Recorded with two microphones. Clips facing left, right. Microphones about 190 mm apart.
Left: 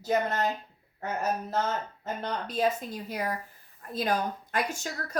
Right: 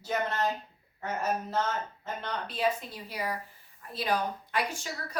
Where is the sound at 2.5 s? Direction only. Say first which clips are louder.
Left 2 dB; 45° left (ahead or behind).